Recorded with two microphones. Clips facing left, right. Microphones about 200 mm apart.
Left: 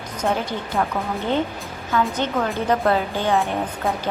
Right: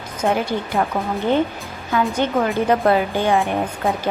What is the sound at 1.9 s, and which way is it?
Speech, 10° right (ahead or behind).